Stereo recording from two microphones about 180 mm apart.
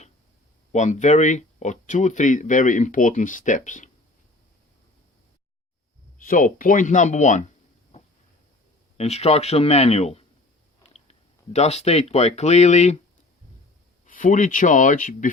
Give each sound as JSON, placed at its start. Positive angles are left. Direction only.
{"t": 0.7, "sound": "speech", "side_deg": 40}
{"t": 6.1, "sound": "speech", "side_deg": 50}
{"t": 9.0, "sound": "speech", "side_deg": 35}
{"t": 14.0, "sound": "speech", "side_deg": 45}